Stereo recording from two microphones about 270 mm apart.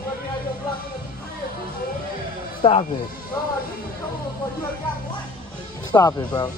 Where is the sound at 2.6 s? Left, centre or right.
Left.